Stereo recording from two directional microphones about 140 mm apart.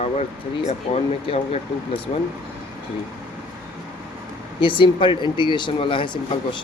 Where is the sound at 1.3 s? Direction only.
40° left (ahead or behind).